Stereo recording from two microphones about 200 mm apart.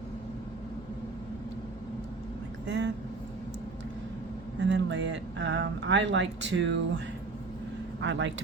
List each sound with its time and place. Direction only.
2.6 s a sound: 60° right (ahead or behind)
4.7 s speech: 65° right (ahead or behind)
8.0 s speech: 65° right (ahead or behind)